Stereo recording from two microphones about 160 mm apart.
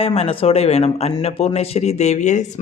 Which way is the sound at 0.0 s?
35° left (ahead or behind).